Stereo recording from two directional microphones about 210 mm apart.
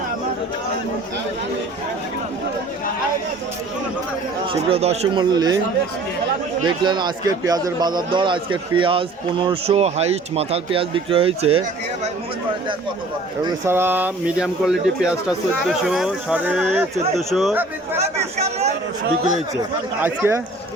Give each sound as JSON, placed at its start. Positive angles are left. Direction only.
{"t": 4.7, "sound": "a man's voice", "side_deg": -30}
{"t": 6.7, "sound": "a man's voice", "side_deg": -20}
{"t": 13.7, "sound": "speech", "side_deg": -10}
{"t": 18.0, "sound": "speech", "side_deg": -30}
{"t": 20.0, "sound": "speech", "side_deg": -10}